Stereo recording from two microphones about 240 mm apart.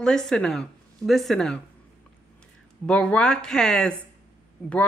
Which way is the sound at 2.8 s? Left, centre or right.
Centre.